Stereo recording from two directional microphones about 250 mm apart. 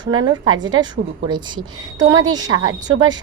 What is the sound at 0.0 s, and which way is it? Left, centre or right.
A woman's voice, centre.